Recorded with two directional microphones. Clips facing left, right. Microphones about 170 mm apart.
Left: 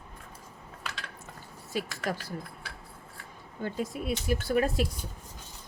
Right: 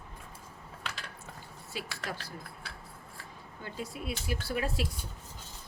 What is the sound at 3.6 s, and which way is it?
Speech, 50° left (ahead or behind).